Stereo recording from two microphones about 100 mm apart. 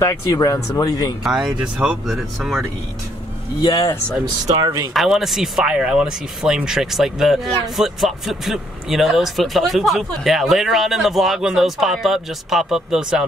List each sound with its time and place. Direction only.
0.0 s speech: 30° left (ahead or behind)
1.2 s speech: 5° right (ahead or behind)
3.6 s speech: 45° left (ahead or behind)
4.6 s speech: 45° right (ahead or behind)
4.9 s speech: 5° right (ahead or behind)